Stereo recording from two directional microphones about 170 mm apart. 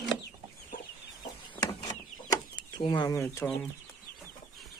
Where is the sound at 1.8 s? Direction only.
25° left (ahead or behind).